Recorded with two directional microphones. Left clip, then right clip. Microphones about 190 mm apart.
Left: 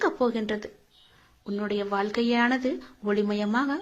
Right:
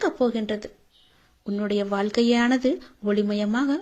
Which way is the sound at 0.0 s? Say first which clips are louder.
Right 2 dB; 40° right (ahead or behind).